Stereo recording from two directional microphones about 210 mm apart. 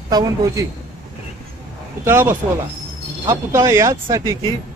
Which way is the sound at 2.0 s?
10° right (ahead or behind).